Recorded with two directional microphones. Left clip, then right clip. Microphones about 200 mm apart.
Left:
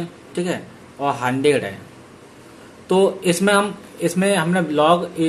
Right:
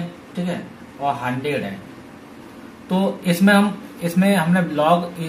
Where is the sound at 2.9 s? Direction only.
40° left (ahead or behind).